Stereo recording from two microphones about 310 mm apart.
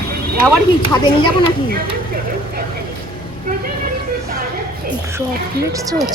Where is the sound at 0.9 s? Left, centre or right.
Centre.